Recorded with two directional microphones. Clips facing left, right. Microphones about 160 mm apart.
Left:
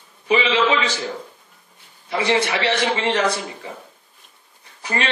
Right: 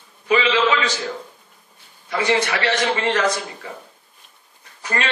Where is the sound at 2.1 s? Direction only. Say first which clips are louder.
Even; 30° left (ahead or behind).